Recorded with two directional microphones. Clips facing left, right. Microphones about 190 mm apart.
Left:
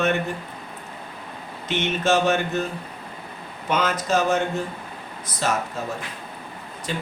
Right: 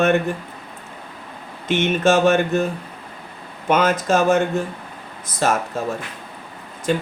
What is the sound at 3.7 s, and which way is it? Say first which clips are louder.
Speech: right 5 dB; 50° right (ahead or behind).